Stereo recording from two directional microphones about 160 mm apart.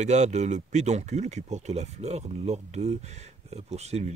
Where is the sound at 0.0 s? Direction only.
45° right (ahead or behind).